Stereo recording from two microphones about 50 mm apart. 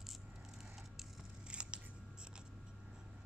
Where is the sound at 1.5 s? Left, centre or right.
Centre.